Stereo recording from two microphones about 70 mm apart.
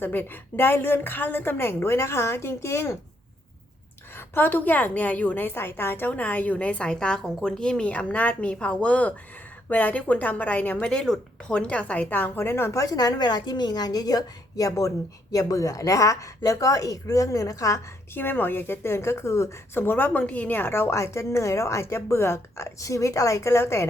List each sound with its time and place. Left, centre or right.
0.0 s a woman's voice: left
4.1 s a woman's voice: left
12.8 s a woman's voice: left
18.1 s a woman's voice: left
20.1 s a woman's voice: centre; by 23.8 s left